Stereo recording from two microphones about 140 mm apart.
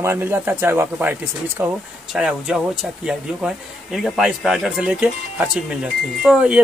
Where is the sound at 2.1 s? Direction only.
5° right (ahead or behind).